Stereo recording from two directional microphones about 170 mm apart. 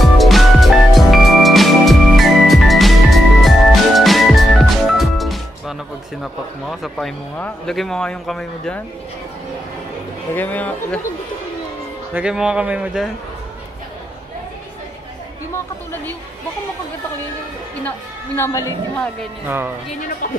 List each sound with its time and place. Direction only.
0.0 s music: centre (ahead or behind)
6.2 s speech: centre (ahead or behind)
10.3 s a woman's voice: 10° left (ahead or behind)
12.1 s speech: 5° right (ahead or behind)
15.5 s a woman's voice: 15° left (ahead or behind)
17.8 s a woman's voice: 15° left (ahead or behind)
19.4 s speech: 15° right (ahead or behind)